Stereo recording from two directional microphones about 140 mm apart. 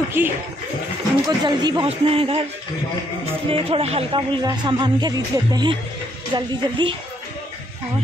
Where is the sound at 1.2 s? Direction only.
30° right (ahead or behind).